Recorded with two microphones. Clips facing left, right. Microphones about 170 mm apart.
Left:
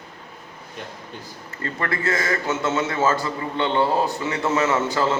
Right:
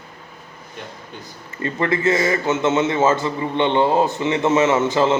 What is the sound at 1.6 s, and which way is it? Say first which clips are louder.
A man's voice: right 6 dB; 20° right (ahead or behind).